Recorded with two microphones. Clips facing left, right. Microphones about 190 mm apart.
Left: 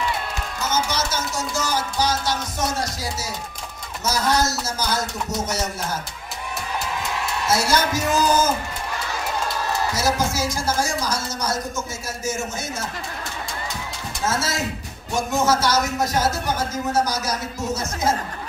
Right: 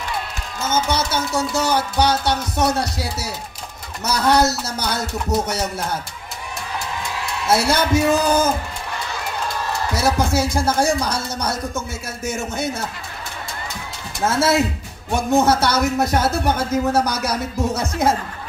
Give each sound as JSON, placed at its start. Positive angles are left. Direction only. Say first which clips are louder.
{"t": 0.7, "sound": "a man's voice", "louder": "right 4 dB", "side_deg": -60}
{"t": 7.4, "sound": "a man's voice", "louder": "right 3 dB", "side_deg": -60}
{"t": 9.9, "sound": "a man's voice", "louder": "right 6 dB", "side_deg": -60}
{"t": 14.2, "sound": "a man's voice", "louder": "right 7 dB", "side_deg": -60}